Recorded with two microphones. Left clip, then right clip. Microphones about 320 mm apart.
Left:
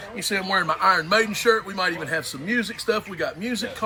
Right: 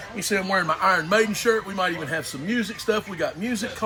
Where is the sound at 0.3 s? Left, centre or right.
Centre.